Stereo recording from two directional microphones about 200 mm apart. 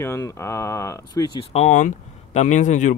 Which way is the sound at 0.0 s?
15° left (ahead or behind).